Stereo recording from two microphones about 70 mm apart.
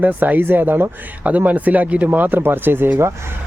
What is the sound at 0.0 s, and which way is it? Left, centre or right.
A man's voice, right.